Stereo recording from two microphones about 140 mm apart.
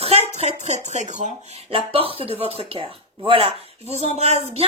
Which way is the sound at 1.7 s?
40° right (ahead or behind).